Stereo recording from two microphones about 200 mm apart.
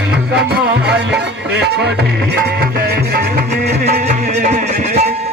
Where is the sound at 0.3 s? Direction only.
55° right (ahead or behind); by 5.1 s 35° right (ahead or behind).